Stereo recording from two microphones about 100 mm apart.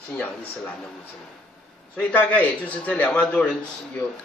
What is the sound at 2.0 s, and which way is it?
Speech, 15° left (ahead or behind).